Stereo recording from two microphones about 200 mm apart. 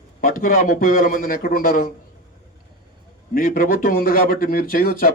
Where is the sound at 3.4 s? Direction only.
45° left (ahead or behind).